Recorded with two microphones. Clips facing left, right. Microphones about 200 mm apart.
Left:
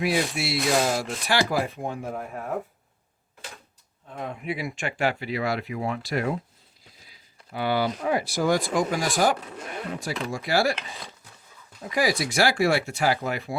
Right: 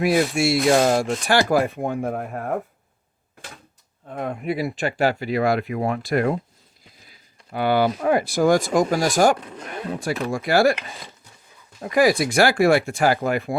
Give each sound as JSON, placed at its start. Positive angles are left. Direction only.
{"t": 0.0, "sound": "speech", "side_deg": -50}
{"t": 4.1, "sound": "speech", "side_deg": -55}
{"t": 4.4, "sound": "speech", "side_deg": -40}
{"t": 7.5, "sound": "speech", "side_deg": -55}
{"t": 11.8, "sound": "speech", "side_deg": -55}